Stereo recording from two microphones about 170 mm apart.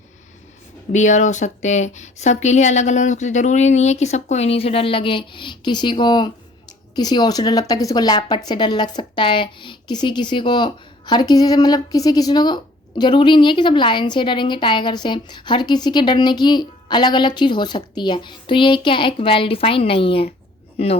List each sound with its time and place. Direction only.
0.9 s speech: 45° left (ahead or behind)